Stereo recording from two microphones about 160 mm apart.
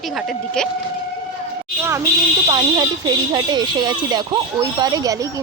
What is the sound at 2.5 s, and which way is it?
Speech, 25° right (ahead or behind).